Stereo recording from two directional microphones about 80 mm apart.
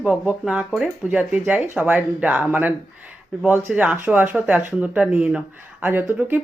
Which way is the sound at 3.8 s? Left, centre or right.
Centre.